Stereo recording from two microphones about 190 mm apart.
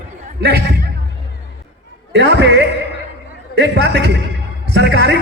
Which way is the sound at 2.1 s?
65° right (ahead or behind).